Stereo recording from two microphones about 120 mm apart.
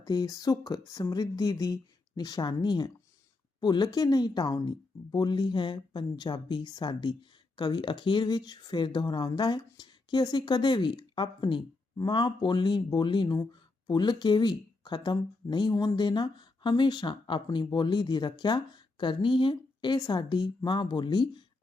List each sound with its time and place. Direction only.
0.0 s speech: 35° left (ahead or behind)